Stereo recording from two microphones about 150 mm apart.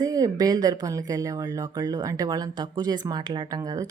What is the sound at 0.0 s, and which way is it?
A woman's voice, 25° right (ahead or behind).